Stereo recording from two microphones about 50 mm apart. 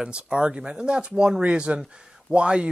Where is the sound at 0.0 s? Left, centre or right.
Centre.